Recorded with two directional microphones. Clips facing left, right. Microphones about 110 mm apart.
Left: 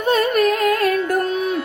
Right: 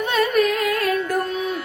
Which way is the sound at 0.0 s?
40° left (ahead or behind).